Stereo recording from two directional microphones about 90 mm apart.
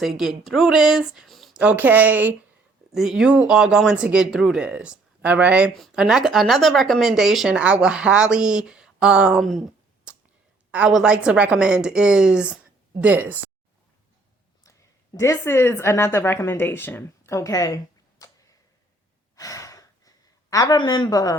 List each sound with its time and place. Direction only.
0.0 s speech: 5° right (ahead or behind)
1.5 s speech: 15° right (ahead or behind)
2.9 s speech: 5° right (ahead or behind)
5.7 s speech: 5° right (ahead or behind)
10.1 s a sound: 15° right (ahead or behind)
10.7 s a woman's voice: 15° right (ahead or behind)
14.6 s a woman's voice: 35° left (ahead or behind)
18.2 s a sound: 40° left (ahead or behind)
19.4 s sigh: 40° left (ahead or behind)
20.7 s speech: 55° left (ahead or behind)